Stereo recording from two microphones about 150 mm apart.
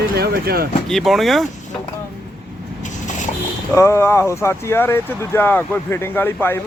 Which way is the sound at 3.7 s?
20° left (ahead or behind).